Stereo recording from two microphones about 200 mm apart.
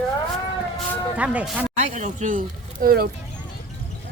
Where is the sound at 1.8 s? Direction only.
35° right (ahead or behind).